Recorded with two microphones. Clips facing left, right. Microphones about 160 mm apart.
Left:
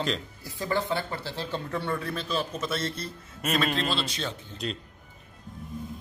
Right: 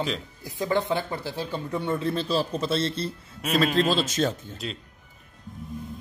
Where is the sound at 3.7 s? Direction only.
40° right (ahead or behind).